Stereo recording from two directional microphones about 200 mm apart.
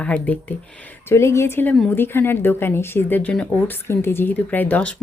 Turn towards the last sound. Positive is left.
turn(degrees=10)  # may be behind; listen again after turning